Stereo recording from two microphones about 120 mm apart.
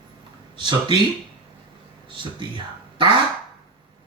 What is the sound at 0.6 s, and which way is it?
Speech, 40° right (ahead or behind).